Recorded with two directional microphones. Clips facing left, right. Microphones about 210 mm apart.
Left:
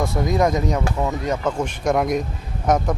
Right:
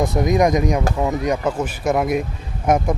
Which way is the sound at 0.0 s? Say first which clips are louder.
Right 3 dB; 20° right (ahead or behind).